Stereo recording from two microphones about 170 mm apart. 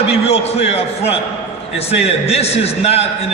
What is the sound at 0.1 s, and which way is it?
A man's voice, 35° left (ahead or behind).